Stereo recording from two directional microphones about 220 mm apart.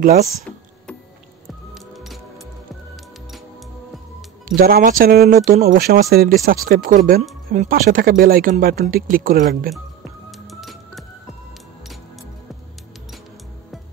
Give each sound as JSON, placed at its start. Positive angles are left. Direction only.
{"t": 0.0, "sound": "speech", "side_deg": -30}
{"t": 1.7, "sound": "music", "side_deg": 0}
{"t": 4.6, "sound": "speech", "side_deg": -40}
{"t": 10.4, "sound": "music", "side_deg": 0}